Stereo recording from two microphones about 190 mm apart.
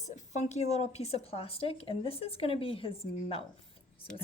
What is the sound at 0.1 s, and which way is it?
A woman's voice, 40° left (ahead or behind).